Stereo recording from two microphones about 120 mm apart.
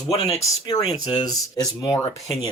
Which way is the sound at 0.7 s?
35° left (ahead or behind).